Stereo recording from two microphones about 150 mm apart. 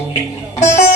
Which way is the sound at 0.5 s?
50° left (ahead or behind).